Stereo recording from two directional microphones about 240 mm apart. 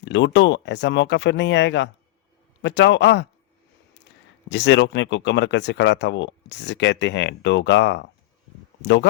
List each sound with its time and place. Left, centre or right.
0.0 s speech: left
4.4 s speech: left